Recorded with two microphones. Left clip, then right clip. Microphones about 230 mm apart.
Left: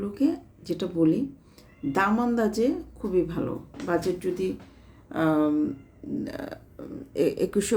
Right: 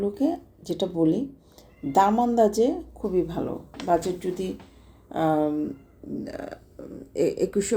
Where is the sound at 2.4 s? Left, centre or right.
Left.